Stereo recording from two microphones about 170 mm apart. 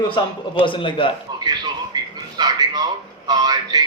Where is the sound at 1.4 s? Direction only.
25° right (ahead or behind).